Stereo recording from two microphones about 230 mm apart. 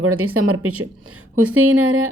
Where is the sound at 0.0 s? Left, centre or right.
Right.